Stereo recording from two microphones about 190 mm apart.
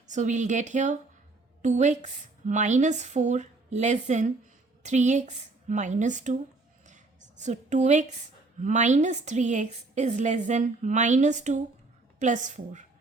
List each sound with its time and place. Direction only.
0.1 s a woman's voice: 40° right (ahead or behind)
6.8 s a sound: 40° right (ahead or behind)
8.6 s a woman's voice: 40° right (ahead or behind)